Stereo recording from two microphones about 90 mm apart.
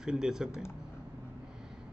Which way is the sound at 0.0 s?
5° right (ahead or behind).